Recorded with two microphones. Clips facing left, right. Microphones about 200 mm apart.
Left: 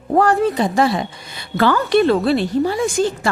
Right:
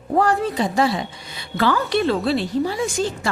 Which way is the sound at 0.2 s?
55° left (ahead or behind).